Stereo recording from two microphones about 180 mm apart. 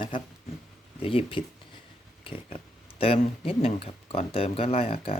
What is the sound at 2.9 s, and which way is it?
Speech, 30° left (ahead or behind).